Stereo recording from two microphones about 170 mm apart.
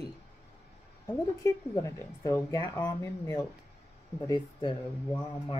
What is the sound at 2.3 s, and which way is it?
Speech, 15° left (ahead or behind).